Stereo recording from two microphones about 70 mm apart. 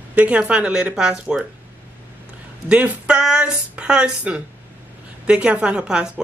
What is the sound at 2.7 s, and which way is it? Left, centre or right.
Speech, centre.